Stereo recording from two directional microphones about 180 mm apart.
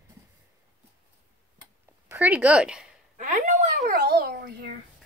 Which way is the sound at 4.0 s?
60° right (ahead or behind).